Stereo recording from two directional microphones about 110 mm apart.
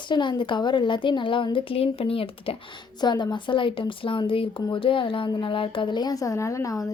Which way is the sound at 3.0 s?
40° left (ahead or behind).